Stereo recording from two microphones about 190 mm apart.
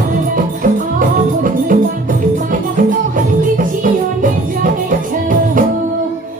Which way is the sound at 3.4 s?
45° right (ahead or behind).